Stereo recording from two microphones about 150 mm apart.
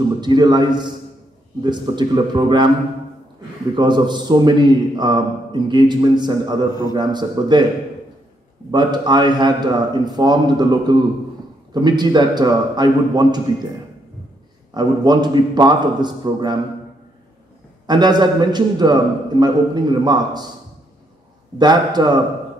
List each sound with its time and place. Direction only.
0.2 s a man's voice: 30° right (ahead or behind)
3.7 s a man's voice: 30° right (ahead or behind)
8.7 s a man's voice: 30° right (ahead or behind)
14.7 s a man's voice: 30° right (ahead or behind)
17.8 s a man's voice: 30° right (ahead or behind)
21.5 s a man's voice: 30° right (ahead or behind)